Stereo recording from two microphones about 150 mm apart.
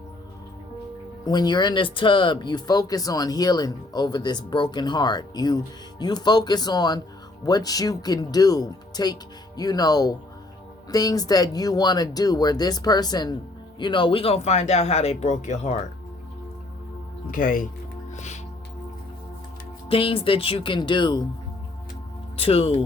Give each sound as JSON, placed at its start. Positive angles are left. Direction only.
{"t": 1.2, "sound": "speech", "side_deg": 30}
{"t": 17.3, "sound": "speech", "side_deg": 65}
{"t": 19.9, "sound": "speech", "side_deg": 40}
{"t": 22.4, "sound": "speech", "side_deg": 40}